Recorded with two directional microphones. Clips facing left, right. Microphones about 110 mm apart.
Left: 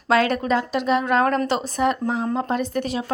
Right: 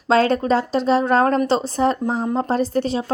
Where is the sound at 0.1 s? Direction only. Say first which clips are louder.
Right 3 dB; 30° right (ahead or behind).